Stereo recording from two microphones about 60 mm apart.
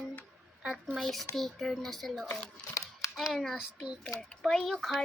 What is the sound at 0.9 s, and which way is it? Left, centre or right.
A child's voice, centre.